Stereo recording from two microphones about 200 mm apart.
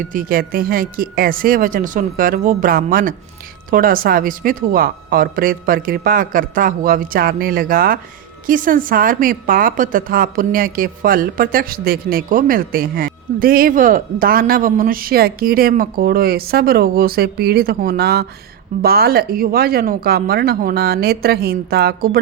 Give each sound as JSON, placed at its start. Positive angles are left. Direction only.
{"t": 0.1, "sound": "a woman's voice", "side_deg": -45}